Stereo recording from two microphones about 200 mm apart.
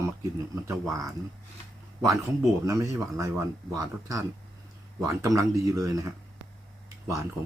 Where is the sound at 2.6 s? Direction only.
15° right (ahead or behind).